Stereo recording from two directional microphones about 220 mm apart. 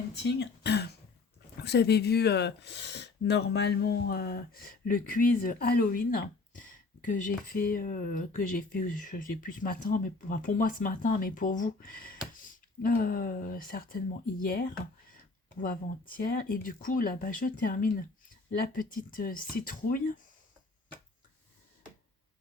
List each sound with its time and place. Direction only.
0.2 s speech: 50° left (ahead or behind)